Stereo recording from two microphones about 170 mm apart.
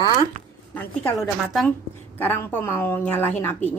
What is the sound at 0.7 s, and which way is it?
Speech, 5° left (ahead or behind).